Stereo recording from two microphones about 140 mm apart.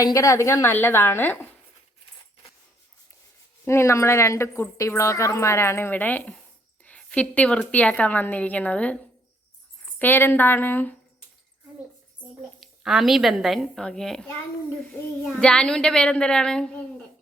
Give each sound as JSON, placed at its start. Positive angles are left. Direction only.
{"t": 0.0, "sound": "a woman's voice", "side_deg": 25}
{"t": 3.7, "sound": "speech", "side_deg": 20}
{"t": 6.8, "sound": "a sound", "side_deg": 10}
{"t": 7.7, "sound": "a woman's voice", "side_deg": 10}
{"t": 10.0, "sound": "a woman's voice", "side_deg": 15}
{"t": 12.5, "sound": "a woman's voice", "side_deg": 0}
{"t": 15.4, "sound": "a woman's voice", "side_deg": 5}